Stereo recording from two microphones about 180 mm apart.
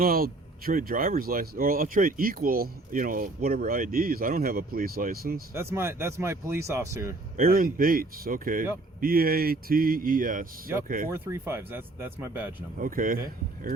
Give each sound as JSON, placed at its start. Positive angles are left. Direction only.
{"t": 0.0, "sound": "speech", "side_deg": -55}
{"t": 5.5, "sound": "speech", "side_deg": -15}
{"t": 7.4, "sound": "speech", "side_deg": -55}
{"t": 11.1, "sound": "speech", "side_deg": -15}
{"t": 12.8, "sound": "speech", "side_deg": -50}